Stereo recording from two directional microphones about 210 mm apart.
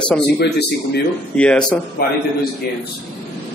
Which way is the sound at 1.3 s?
5° left (ahead or behind).